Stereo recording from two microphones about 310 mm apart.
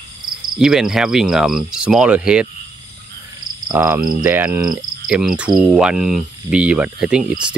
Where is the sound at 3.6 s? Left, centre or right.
Centre.